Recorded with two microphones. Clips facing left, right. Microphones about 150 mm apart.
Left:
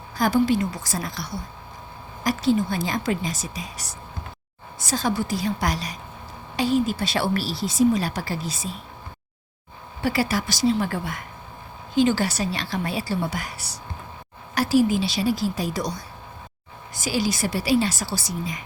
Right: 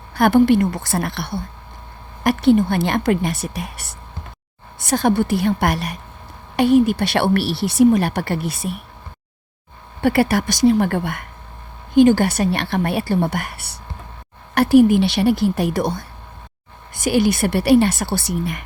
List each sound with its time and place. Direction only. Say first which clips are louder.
0.1 s speech: right 7 dB; 65° right (ahead or behind)
10.0 s speech: right 7 dB; 60° right (ahead or behind)